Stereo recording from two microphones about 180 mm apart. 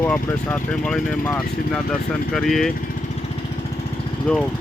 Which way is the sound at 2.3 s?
Centre (ahead or behind).